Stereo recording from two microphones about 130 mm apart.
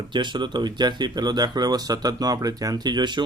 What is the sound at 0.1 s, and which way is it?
Speech, 35° right (ahead or behind).